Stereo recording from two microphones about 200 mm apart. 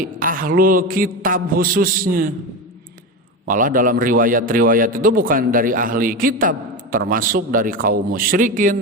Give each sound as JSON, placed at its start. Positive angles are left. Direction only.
{"t": 0.0, "sound": "a man's voice", "side_deg": -45}
{"t": 3.4, "sound": "a man's voice", "side_deg": -45}